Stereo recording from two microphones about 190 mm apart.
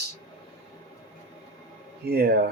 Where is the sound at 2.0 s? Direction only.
55° right (ahead or behind).